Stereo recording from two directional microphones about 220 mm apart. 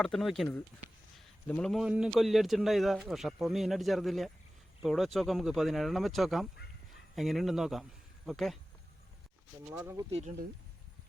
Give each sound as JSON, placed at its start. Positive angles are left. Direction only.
{"t": 0.0, "sound": "a man's voice", "side_deg": 0}
{"t": 1.5, "sound": "a man's voice", "side_deg": 5}
{"t": 9.7, "sound": "speech", "side_deg": -10}
{"t": 10.1, "sound": "speech", "side_deg": -30}